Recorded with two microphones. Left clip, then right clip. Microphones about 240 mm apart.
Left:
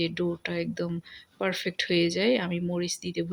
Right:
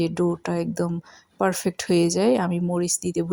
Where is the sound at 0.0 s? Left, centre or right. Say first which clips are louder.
Right 5 dB; centre.